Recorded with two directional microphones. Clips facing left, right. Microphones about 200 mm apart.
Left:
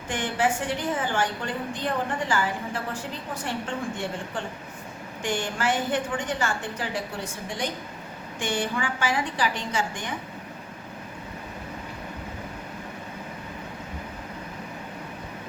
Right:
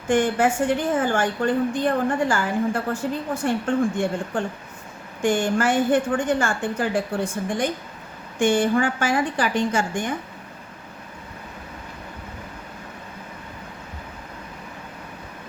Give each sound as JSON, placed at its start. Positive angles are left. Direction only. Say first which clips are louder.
{"t": 0.1, "sound": "a woman's voice", "louder": "right 7 dB", "side_deg": -50}